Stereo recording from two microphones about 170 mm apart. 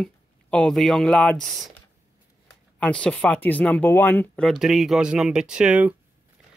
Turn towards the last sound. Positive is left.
turn(degrees=-5)  # may be behind; listen again after turning